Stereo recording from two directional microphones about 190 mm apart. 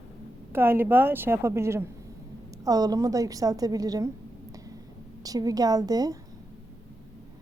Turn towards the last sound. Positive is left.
turn(degrees=-20)  # may be behind; listen again after turning